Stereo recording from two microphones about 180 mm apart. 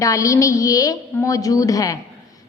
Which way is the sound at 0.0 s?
20° left (ahead or behind).